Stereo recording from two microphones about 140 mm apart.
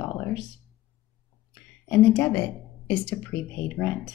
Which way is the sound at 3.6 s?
10° left (ahead or behind).